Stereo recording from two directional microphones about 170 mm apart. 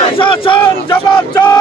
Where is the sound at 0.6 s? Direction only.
10° left (ahead or behind).